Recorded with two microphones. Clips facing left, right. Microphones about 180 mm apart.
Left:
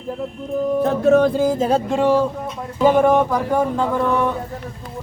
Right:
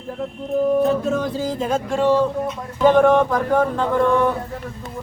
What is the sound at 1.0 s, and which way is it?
Music, 65° left (ahead or behind).